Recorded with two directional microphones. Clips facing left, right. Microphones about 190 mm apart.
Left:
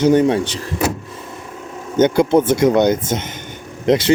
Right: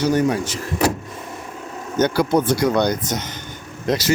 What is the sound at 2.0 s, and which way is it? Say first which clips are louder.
Speech: left 5 dB; 25° left (ahead or behind).